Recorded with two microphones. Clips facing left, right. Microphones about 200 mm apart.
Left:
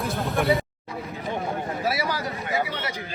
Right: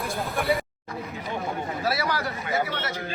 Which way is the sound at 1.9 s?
20° left (ahead or behind).